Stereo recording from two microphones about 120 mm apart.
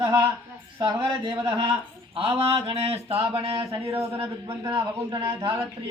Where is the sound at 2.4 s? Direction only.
50° right (ahead or behind).